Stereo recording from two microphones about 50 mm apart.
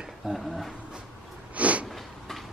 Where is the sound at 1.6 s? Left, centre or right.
Right.